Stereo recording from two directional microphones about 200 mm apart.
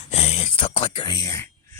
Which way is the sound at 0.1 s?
30° left (ahead or behind).